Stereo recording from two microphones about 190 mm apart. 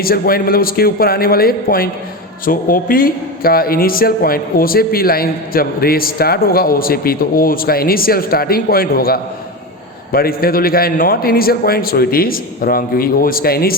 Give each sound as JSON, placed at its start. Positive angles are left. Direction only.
{"t": 0.0, "sound": "a man's voice", "side_deg": 50}